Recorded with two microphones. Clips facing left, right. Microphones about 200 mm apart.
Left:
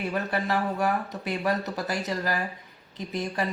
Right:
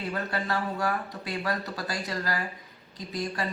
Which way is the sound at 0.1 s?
20° left (ahead or behind).